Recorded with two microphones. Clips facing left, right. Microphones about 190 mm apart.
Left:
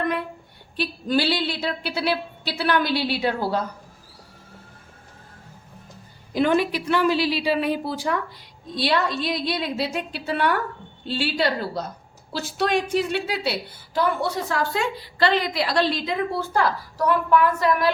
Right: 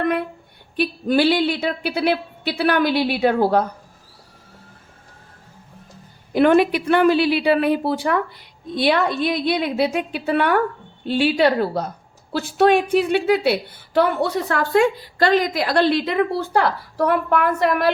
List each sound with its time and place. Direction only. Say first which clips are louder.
0.0 s a sound: right 4 dB; 60° right (ahead or behind)
0.8 s a woman's voice: right 5 dB; 55° right (ahead or behind)
6.3 s a woman's voice: right 6 dB; 60° right (ahead or behind)